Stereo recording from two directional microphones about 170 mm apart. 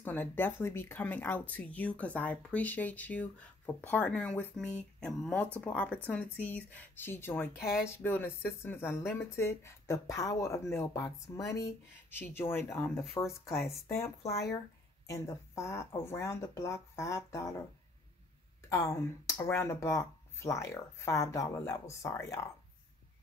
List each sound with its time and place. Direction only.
0.0 s speech: 10° left (ahead or behind)
18.7 s speech: 20° left (ahead or behind)